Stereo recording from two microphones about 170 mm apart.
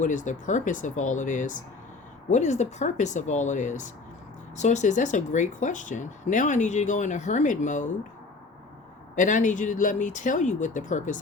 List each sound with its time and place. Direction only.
0.0 s speech: 50° left (ahead or behind)
9.1 s speech: 50° left (ahead or behind)